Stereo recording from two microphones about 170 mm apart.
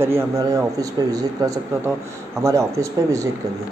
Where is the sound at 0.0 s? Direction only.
15° right (ahead or behind).